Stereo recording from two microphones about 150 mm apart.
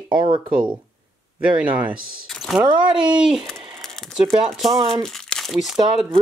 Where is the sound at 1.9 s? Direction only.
75° right (ahead or behind).